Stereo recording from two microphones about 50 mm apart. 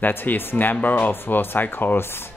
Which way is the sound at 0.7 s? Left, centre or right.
Left.